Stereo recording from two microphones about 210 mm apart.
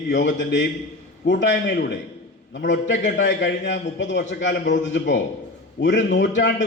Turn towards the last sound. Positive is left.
turn(degrees=60)  # may be behind; listen again after turning